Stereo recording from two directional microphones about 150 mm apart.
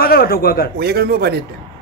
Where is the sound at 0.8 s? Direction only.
90° right.